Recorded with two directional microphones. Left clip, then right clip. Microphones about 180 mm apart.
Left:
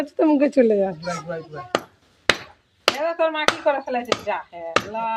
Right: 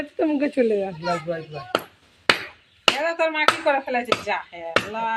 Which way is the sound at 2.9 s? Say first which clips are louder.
Even; 15° left (ahead or behind).